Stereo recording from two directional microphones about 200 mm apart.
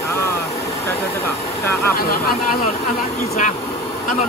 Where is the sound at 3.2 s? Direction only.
35° left (ahead or behind).